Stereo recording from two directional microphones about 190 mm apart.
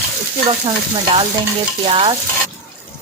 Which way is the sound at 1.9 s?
30° right (ahead or behind).